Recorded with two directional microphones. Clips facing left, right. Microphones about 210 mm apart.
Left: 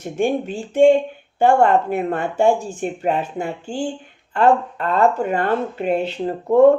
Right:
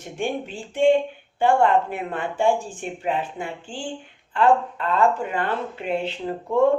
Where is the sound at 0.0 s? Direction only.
45° left (ahead or behind).